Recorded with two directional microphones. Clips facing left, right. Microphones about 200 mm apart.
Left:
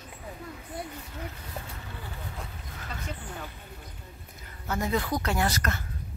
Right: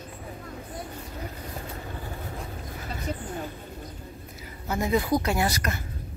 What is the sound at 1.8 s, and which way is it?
Vehicle, 40° right (ahead or behind).